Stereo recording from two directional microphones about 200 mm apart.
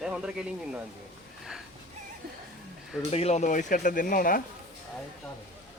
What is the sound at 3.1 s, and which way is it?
Speech, 30° left (ahead or behind).